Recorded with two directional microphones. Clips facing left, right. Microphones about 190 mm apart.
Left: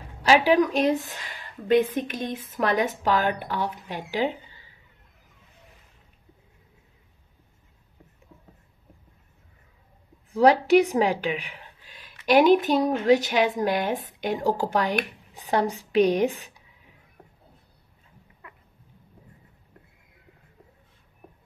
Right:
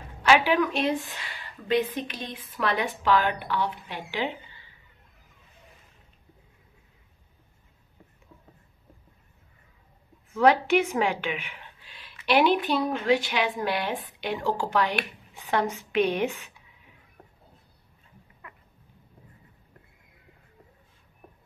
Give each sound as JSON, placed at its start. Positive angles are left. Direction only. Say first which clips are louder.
{"t": 0.2, "sound": "a woman's voice", "louder": "left 3 dB", "side_deg": 35}
{"t": 10.3, "sound": "a woman's voice", "louder": "left 3 dB", "side_deg": 35}